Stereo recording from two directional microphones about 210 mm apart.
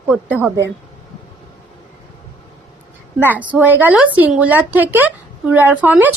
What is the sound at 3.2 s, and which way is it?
Speech, 5° right (ahead or behind).